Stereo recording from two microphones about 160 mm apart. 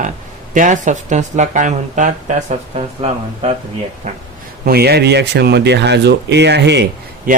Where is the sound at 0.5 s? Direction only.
50° right (ahead or behind).